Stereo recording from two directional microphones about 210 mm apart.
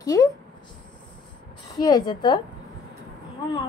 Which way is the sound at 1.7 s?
20° left (ahead or behind).